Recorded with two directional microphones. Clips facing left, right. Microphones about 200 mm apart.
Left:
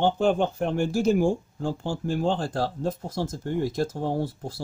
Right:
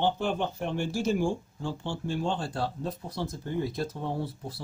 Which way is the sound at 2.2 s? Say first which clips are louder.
Left 6 dB; 90° left.